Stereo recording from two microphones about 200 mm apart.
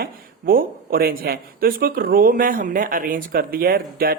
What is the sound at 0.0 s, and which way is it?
Speech, 45° right (ahead or behind).